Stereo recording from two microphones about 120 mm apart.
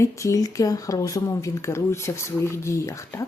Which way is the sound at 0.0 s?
25° left (ahead or behind).